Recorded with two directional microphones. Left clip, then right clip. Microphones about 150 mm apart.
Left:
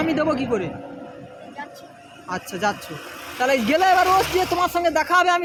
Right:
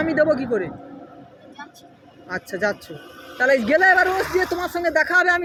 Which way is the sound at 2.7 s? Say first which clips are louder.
Left 4 dB; 40° left (ahead or behind).